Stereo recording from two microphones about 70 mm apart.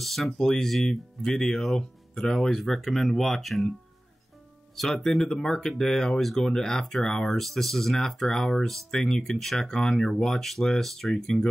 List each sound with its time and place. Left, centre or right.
0.0 s speech: centre
4.7 s speech: centre